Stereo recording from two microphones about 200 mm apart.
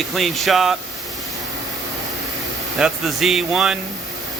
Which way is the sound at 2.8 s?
Centre (ahead or behind).